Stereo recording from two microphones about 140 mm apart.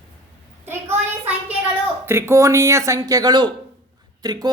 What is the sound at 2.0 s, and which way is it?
Speech, 15° right (ahead or behind).